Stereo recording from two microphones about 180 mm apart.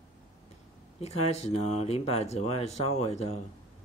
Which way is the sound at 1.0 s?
35° left (ahead or behind).